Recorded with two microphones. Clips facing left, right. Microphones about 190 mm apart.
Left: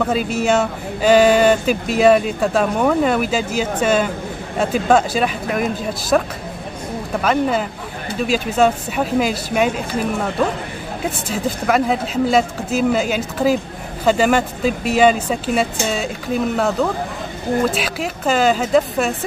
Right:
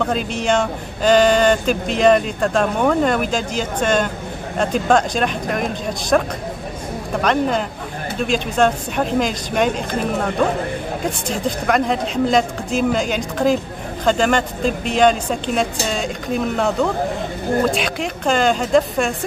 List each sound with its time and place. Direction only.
0.0 s speech: 5° left (ahead or behind)
7.2 s speech: 5° left (ahead or behind)
11.1 s speech: 5° left (ahead or behind)